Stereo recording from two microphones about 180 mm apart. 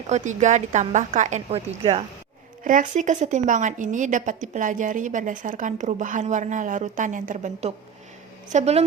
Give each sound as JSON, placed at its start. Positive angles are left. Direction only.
{"t": 0.1, "sound": "a woman's voice", "side_deg": -40}
{"t": 2.6, "sound": "a woman's voice", "side_deg": -45}